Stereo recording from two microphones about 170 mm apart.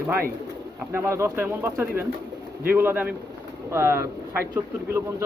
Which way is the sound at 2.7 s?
10° right (ahead or behind).